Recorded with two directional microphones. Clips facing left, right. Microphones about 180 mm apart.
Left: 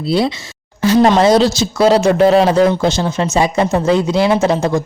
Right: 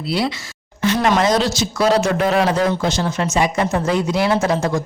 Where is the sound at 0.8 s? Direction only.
35° left (ahead or behind).